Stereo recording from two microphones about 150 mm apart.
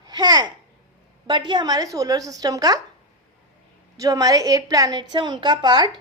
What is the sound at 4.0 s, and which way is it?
A woman's voice, 25° right (ahead or behind).